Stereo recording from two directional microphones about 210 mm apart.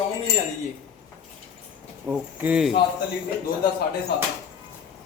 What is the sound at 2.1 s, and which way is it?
Speech, 5° right (ahead or behind).